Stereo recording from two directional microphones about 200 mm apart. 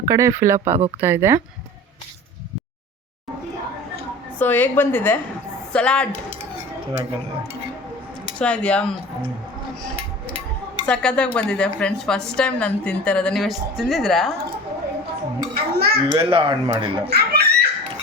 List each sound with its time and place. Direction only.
0.1 s speech: 15° right (ahead or behind)
4.4 s a woman's voice: 10° left (ahead or behind)
8.4 s a woman's voice: 5° left (ahead or behind)
10.8 s a woman's voice: 5° left (ahead or behind)
15.5 s a sound: 50° right (ahead or behind)
16.1 s speech: 25° right (ahead or behind)
17.1 s a sound: 55° right (ahead or behind)